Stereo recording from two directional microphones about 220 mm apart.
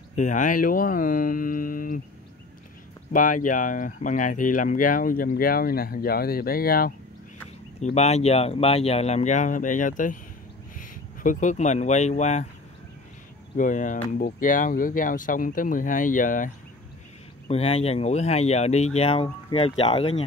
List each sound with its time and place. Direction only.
0.1 s speech: 35° left (ahead or behind)
3.1 s speech: 35° left (ahead or behind)
7.8 s speech: 30° left (ahead or behind)
13.6 s speech: 35° left (ahead or behind)